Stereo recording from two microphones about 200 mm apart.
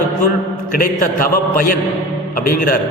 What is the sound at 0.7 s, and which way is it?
A man's voice, 45° left (ahead or behind).